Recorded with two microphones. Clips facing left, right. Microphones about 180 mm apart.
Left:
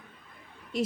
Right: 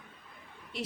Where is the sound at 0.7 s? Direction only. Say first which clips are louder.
Left 8 dB; 45° left (ahead or behind).